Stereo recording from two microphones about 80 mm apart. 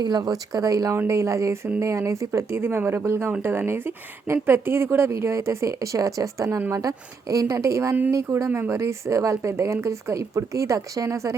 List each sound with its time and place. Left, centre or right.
0.0 s a woman's voice: right
8.4 s speech: right
8.7 s a woman's voice: right